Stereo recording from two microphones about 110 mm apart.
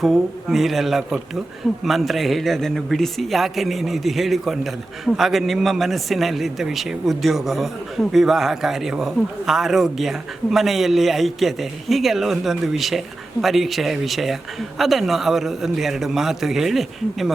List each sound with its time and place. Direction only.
0.0 s a man's voice: centre (ahead or behind)